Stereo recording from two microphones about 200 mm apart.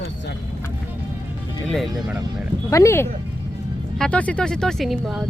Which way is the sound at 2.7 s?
15° left (ahead or behind).